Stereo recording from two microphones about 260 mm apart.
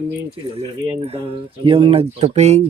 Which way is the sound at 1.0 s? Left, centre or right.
Right.